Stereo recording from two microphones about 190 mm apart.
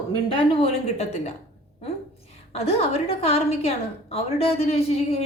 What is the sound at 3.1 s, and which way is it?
A woman's voice, 30° left (ahead or behind).